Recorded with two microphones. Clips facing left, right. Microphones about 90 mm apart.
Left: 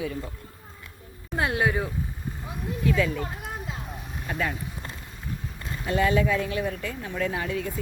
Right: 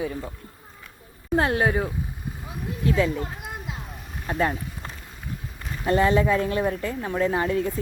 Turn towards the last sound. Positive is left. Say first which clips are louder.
# right 5 dB
turn(degrees=-40)  # may be behind; listen again after turning